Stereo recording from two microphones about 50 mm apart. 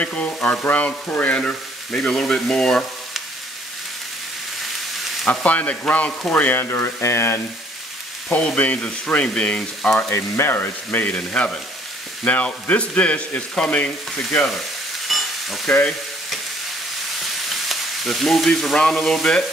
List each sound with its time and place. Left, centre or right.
0.0 s speech: left
0.4 s frying: left
1.3 s speech: centre
5.3 s speech: left
6.5 s frying: left
7.0 s frying: left
8.7 s speech: left
10.0 s frying: left
10.5 s frying: left
11.1 s speech: left
15.0 s frying: centre
17.2 s frying: centre
18.8 s speech: centre